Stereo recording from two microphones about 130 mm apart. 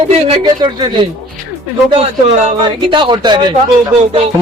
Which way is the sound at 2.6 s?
40° right (ahead or behind).